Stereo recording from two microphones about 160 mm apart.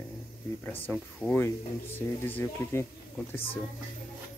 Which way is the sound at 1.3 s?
15° left (ahead or behind).